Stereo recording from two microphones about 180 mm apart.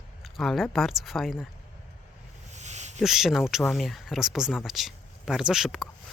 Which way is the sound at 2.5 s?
40° right (ahead or behind).